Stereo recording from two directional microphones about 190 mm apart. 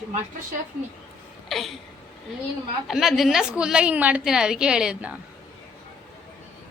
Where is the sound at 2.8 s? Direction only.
Centre (ahead or behind).